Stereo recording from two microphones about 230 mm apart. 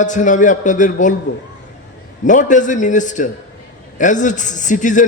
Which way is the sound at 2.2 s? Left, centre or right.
Left.